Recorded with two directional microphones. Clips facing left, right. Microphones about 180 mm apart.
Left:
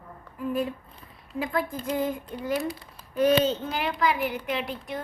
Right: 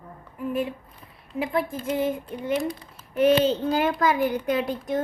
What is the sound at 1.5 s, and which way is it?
Speech, 25° right (ahead or behind).